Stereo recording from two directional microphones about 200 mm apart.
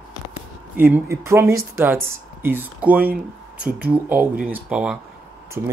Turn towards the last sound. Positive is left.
turn(degrees=-10)  # may be behind; listen again after turning